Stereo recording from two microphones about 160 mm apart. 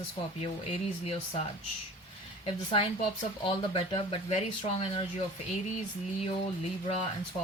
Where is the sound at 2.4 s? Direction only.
35° left (ahead or behind).